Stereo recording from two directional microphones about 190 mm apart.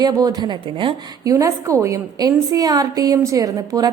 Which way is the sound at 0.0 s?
20° right (ahead or behind).